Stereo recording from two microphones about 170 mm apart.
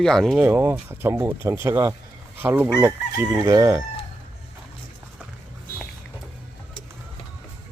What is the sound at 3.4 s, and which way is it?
Speech, 20° right (ahead or behind).